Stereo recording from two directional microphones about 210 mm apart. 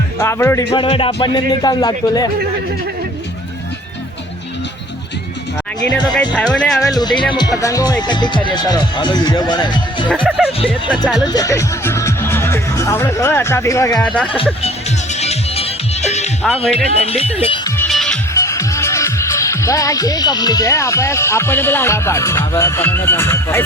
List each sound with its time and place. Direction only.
0.2 s speech: 10° left (ahead or behind)
0.7 s speech: 25° left (ahead or behind)
6.1 s speech: 5° left (ahead or behind)
6.8 s speech: 20° left (ahead or behind)
10.2 s speech: centre (ahead or behind)
11.2 s speech: 20° left (ahead or behind)
15.1 s music: 30° left (ahead or behind)
16.7 s speech: 30° left (ahead or behind)
17.7 s music: centre (ahead or behind)
18.3 s speech: 15° left (ahead or behind)